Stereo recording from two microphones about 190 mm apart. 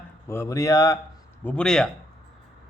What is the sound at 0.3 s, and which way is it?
Speech, 15° left (ahead or behind).